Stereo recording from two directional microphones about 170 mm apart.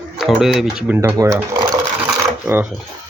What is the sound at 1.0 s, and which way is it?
Speech, 15° right (ahead or behind).